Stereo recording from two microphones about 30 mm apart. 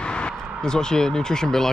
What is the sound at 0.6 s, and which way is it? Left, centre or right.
Speech, left.